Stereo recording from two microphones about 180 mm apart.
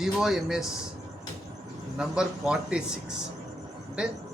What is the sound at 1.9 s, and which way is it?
A man's voice, 5° right (ahead or behind).